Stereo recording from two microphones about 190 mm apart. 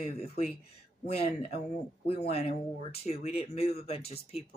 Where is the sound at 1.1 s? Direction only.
35° left (ahead or behind).